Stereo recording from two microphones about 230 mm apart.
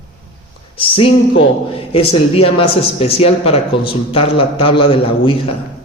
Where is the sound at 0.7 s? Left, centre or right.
Left.